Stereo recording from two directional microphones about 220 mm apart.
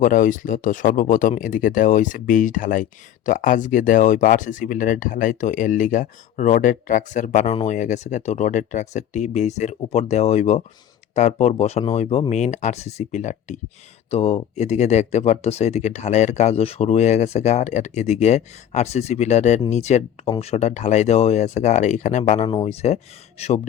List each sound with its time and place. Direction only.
0.0 s speech: 35° left (ahead or behind)